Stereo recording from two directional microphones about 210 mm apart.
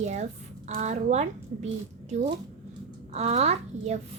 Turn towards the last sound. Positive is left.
turn(degrees=-30)  # may be behind; listen again after turning